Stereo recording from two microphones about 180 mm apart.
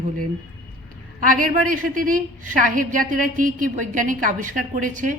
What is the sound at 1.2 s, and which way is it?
A woman's voice, 50° right (ahead or behind).